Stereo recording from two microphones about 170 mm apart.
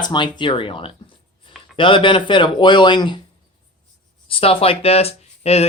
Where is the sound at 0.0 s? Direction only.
25° left (ahead or behind).